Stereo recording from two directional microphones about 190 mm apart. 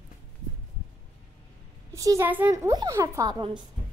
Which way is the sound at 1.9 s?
15° right (ahead or behind).